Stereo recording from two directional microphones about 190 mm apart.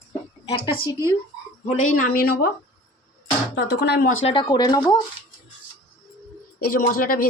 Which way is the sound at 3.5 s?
65° left (ahead or behind).